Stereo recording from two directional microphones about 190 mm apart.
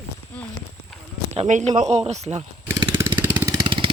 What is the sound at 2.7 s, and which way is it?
Vehicle, 15° right (ahead or behind).